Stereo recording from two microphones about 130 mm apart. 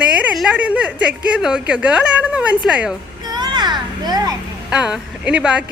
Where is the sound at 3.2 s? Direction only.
35° right (ahead or behind).